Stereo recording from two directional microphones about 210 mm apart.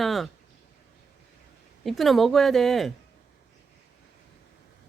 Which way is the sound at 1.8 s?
Centre (ahead or behind).